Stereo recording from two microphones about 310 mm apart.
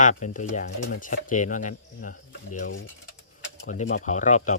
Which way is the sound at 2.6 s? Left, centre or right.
Left.